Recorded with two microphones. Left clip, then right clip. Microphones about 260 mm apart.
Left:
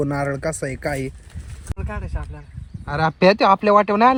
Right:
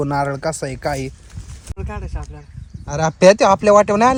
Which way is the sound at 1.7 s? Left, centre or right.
Centre.